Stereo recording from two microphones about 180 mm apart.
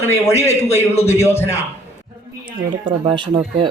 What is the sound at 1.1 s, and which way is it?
Speech, 15° left (ahead or behind).